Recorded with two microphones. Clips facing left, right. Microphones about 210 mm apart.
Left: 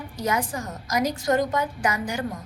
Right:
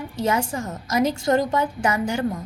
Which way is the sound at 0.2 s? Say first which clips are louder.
Right 3 dB; 25° right (ahead or behind).